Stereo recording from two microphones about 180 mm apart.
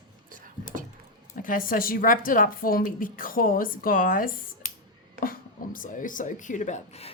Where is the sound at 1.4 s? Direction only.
50° left (ahead or behind).